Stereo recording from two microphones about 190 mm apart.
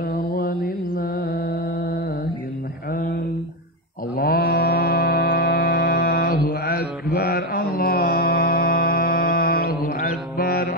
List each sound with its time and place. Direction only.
0.0 s mantra: 50° left (ahead or behind)
4.2 s mantra: 50° left (ahead or behind)